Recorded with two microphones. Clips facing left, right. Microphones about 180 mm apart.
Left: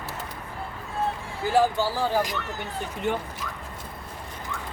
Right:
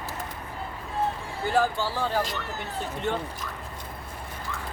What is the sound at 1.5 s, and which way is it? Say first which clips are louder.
Speech: left 3 dB; 15° left (ahead or behind).